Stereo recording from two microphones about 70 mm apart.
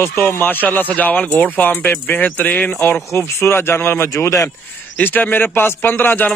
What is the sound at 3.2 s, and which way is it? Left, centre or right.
Speech, left.